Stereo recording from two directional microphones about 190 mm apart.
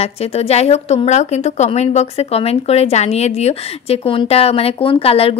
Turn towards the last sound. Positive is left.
turn(degrees=30)  # may be behind; listen again after turning